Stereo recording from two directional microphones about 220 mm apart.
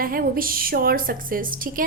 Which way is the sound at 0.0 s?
40° right (ahead or behind).